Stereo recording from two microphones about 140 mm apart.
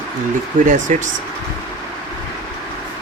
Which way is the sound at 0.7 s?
65° right (ahead or behind).